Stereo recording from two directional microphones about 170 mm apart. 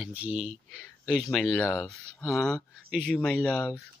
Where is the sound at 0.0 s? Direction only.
10° right (ahead or behind).